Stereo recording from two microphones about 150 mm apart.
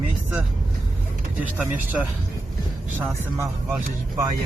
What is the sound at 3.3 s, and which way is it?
Speech, 15° right (ahead or behind).